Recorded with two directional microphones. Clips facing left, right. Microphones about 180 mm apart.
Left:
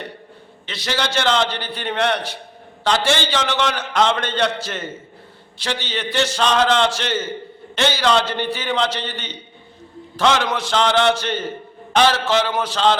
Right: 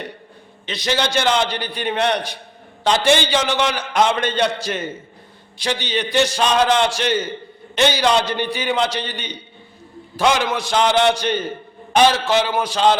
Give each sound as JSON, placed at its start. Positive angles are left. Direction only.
{"t": 0.6, "sound": "a man's voice", "side_deg": -15}